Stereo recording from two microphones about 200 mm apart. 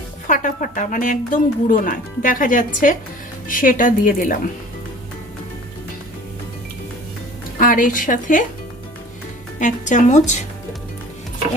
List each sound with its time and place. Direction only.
0.3 s a woman's voice: 40° left (ahead or behind)
7.6 s a woman's voice: 45° left (ahead or behind)
9.6 s speech: 40° left (ahead or behind)